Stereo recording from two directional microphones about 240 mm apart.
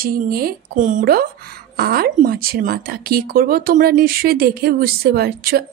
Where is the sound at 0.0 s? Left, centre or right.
Right.